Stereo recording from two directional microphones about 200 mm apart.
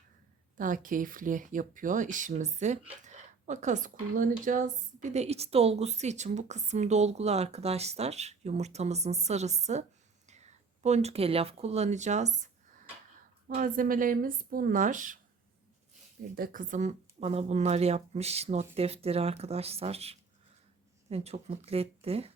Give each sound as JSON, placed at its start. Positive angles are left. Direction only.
{"t": 0.5, "sound": "speech", "side_deg": -40}
{"t": 10.8, "sound": "speech", "side_deg": -35}
{"t": 13.6, "sound": "speech", "side_deg": -45}
{"t": 16.3, "sound": "speech", "side_deg": -45}